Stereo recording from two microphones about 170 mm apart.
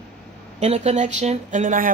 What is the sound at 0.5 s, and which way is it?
A woman's voice, 40° right (ahead or behind).